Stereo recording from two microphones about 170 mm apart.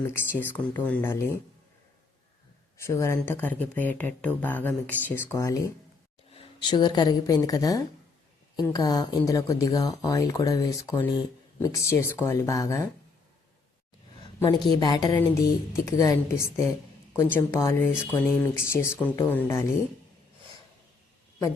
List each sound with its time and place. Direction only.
0.3 s speech: 10° left (ahead or behind)
2.7 s speech: 15° left (ahead or behind)
6.3 s speech: 30° left (ahead or behind)
14.3 s speech: 20° left (ahead or behind)